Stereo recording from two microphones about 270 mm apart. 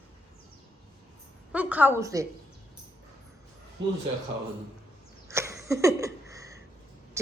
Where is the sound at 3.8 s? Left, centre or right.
Right.